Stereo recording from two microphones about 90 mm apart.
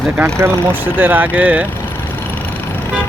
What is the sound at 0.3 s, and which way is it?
Speech, 25° right (ahead or behind).